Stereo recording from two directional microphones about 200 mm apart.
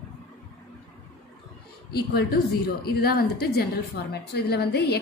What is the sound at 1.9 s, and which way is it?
A woman's voice, 50° left (ahead or behind).